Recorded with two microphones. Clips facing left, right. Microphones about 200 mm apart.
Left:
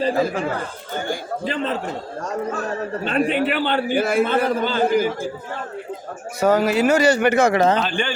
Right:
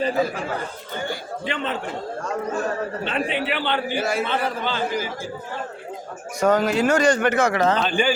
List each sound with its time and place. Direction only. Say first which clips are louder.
1.5 s a man's voice: left 3 dB; 35° left (ahead or behind)
3.0 s a man's voice: left 9 dB; 45° left (ahead or behind)
6.4 s speech: left 2 dB; 5° left (ahead or behind)
7.4 s a man's voice: left 3 dB; 25° left (ahead or behind)
7.8 s speech: right 2 dB; centre (ahead or behind)